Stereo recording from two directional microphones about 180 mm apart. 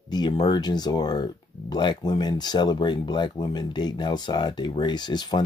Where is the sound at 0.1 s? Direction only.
25° left (ahead or behind).